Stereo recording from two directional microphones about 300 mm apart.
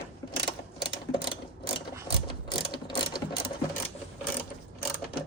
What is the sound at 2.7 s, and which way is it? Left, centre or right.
Ratchet, centre.